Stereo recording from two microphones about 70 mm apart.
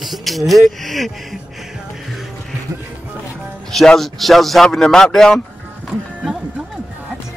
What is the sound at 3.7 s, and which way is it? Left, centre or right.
Speech, centre.